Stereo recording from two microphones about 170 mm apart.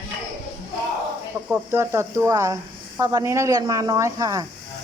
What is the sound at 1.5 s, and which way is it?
Speech, 15° right (ahead or behind).